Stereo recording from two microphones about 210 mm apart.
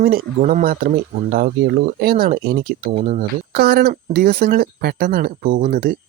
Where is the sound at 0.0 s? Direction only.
45° right (ahead or behind).